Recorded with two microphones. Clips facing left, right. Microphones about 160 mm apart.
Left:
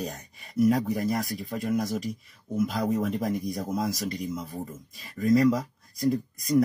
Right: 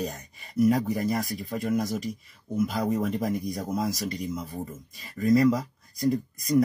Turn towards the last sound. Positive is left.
turn(degrees=0)  # may be behind; listen again after turning